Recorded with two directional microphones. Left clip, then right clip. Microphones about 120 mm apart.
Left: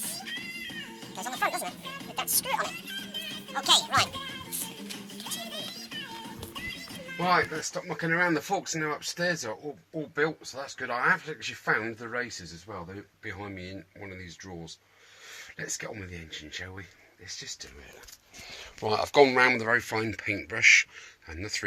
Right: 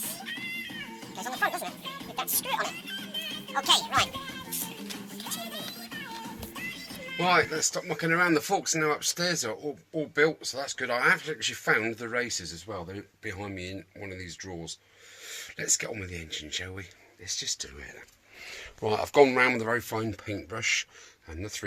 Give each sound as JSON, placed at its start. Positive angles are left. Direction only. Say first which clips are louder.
{"t": 0.2, "sound": "music", "louder": "right 3 dB", "side_deg": 35}
{"t": 2.8, "sound": "music", "louder": "right 1 dB", "side_deg": 35}
{"t": 3.5, "sound": "speech", "louder": "left 1 dB", "side_deg": 25}
{"t": 4.4, "sound": "music", "louder": "right 1 dB", "side_deg": 0}
{"t": 7.3, "sound": "speech", "louder": "right 1 dB", "side_deg": -20}
{"t": 15.5, "sound": "speech", "louder": "right 6 dB", "side_deg": -25}
{"t": 18.8, "sound": "speech", "louder": "even", "side_deg": -15}